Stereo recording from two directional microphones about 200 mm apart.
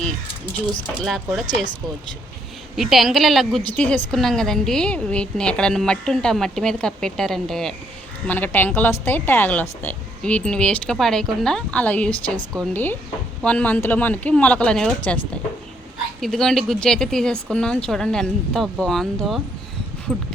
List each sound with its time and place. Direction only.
1.0 s a woman's voice: centre (ahead or behind)
1.5 s speech: 25° left (ahead or behind)
2.7 s a woman's voice: centre (ahead or behind)
16.2 s a woman's voice: centre (ahead or behind)